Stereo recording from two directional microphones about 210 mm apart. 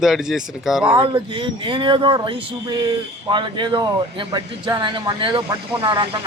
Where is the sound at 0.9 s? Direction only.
20° right (ahead or behind).